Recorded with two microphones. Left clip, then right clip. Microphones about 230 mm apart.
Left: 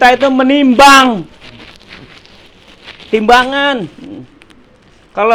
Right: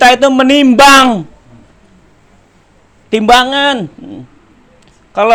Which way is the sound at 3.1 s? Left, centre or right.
Right.